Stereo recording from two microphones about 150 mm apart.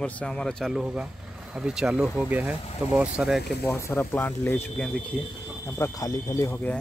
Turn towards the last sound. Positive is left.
turn(degrees=15)  # may be behind; listen again after turning